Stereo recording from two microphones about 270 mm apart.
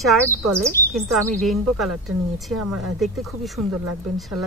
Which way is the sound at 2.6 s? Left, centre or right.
Right.